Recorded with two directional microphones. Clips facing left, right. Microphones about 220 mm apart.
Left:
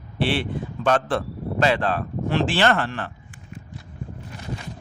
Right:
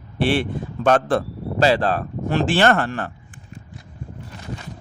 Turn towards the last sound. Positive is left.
turn(degrees=-45)  # may be behind; listen again after turning